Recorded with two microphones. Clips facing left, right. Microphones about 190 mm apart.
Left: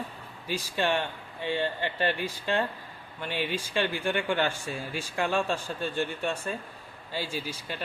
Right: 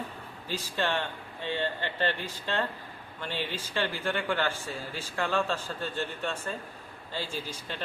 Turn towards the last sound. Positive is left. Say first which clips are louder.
# left 2 dB
turn(degrees=10)  # may be behind; listen again after turning